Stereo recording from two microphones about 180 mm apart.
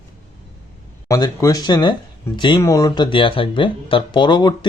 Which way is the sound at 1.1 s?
20° left (ahead or behind).